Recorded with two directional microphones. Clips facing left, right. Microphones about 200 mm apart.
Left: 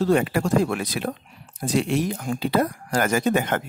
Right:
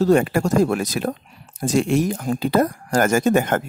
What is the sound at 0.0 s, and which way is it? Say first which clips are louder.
A child's voice: right 4 dB; 45° right (ahead or behind).